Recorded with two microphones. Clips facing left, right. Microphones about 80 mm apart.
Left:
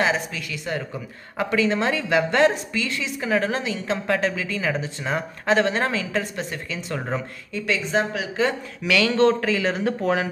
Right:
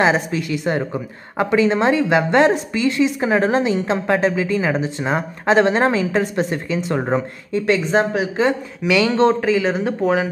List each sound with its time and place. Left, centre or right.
0.0 s a woman's voice: right
7.6 s a woman's voice: right; by 10.2 s centre